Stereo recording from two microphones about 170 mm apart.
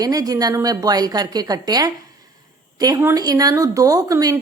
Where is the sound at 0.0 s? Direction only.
20° right (ahead or behind).